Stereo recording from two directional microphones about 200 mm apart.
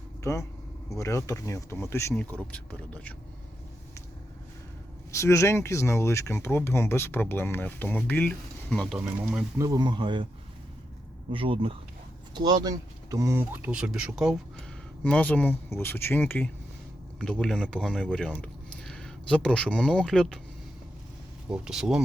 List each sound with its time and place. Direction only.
0.2 s speech: 15° left (ahead or behind)
5.1 s speech: 15° left (ahead or behind); by 9.4 s centre (ahead or behind)
9.6 s speech: 20° right (ahead or behind)
11.3 s speech: 25° right (ahead or behind); by 20.4 s 5° left (ahead or behind)
21.5 s speech: 5° right (ahead or behind)